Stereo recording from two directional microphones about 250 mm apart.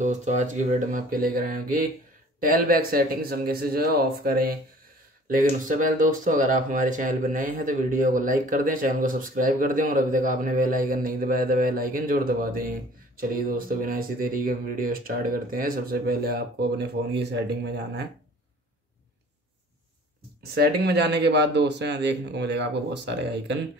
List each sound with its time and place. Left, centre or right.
0.0 s speech: right
5.7 s speech: right
20.5 s a man's voice: right